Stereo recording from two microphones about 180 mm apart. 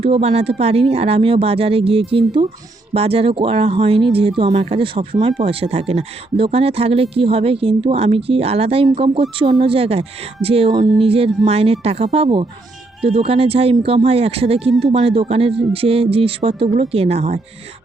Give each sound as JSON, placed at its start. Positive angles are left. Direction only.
{"t": 0.0, "sound": "speech", "side_deg": -30}